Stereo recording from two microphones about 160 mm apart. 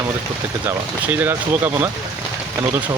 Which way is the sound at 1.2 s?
15° right (ahead or behind).